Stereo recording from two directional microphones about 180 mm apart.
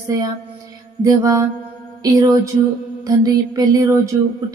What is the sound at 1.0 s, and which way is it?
Music, 20° right (ahead or behind).